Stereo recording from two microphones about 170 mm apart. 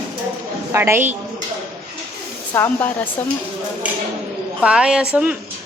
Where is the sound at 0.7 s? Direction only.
15° right (ahead or behind).